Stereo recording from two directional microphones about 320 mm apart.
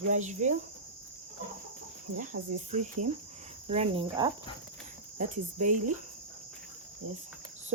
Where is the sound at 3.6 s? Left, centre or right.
Centre.